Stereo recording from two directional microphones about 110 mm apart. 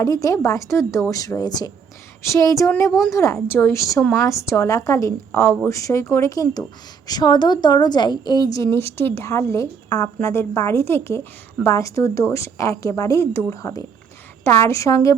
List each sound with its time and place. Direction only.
0.0 s a woman's voice: 30° left (ahead or behind)